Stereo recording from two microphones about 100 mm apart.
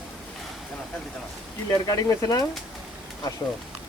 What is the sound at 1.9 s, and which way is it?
Speech, 35° left (ahead or behind).